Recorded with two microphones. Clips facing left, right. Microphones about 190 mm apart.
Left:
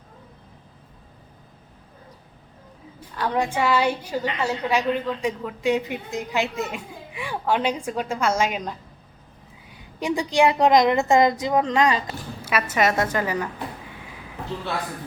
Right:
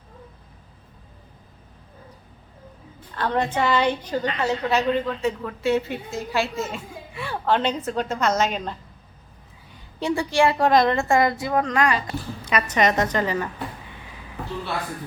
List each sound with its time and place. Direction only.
3.2 s a woman's voice: 10° left (ahead or behind)
9.7 s a woman's voice: 15° left (ahead or behind)
12.4 s a woman's voice: 5° left (ahead or behind)